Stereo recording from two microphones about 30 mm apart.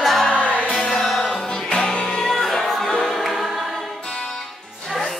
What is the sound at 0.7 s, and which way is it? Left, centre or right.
Music, left.